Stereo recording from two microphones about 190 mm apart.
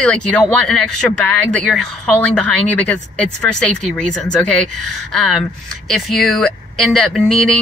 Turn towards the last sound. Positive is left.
turn(degrees=0)  # may be behind; listen again after turning